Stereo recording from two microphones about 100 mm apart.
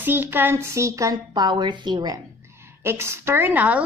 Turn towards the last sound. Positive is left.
turn(degrees=-15)  # may be behind; listen again after turning